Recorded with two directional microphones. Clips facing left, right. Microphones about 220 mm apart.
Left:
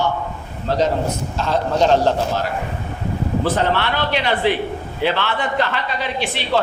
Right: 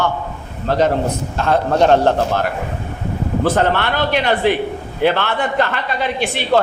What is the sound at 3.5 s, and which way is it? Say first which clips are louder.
A woman's voice: right 3 dB; 50° right (ahead or behind).